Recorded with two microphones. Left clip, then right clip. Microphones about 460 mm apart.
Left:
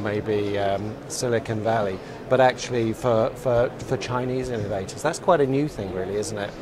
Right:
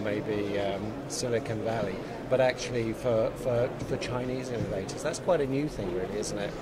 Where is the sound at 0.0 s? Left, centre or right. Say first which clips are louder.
Left 6 dB; left.